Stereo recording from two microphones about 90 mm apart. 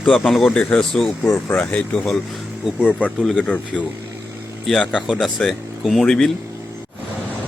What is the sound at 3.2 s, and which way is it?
Speech, 5° left (ahead or behind).